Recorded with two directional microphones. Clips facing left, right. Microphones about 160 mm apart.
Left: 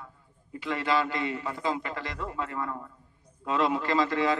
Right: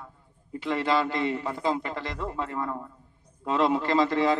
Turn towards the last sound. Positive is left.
turn(degrees=-30)  # may be behind; listen again after turning